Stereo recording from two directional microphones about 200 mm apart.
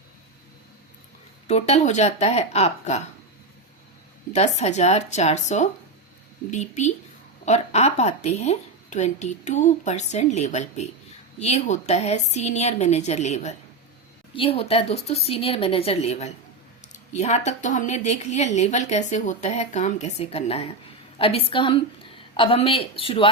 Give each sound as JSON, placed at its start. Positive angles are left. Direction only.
{"t": 1.5, "sound": "a woman's voice", "side_deg": 30}
{"t": 4.3, "sound": "a woman's voice", "side_deg": 35}